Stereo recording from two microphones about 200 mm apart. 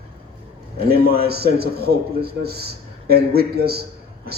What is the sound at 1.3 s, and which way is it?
A man's voice, 50° right (ahead or behind).